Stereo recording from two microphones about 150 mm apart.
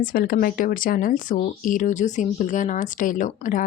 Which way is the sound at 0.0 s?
70° left (ahead or behind).